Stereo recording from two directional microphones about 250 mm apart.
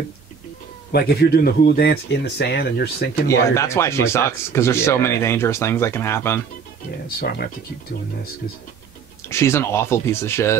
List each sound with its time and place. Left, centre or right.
0.9 s speech: left
3.3 s speech: centre
7.2 s speech: left
9.3 s speech: centre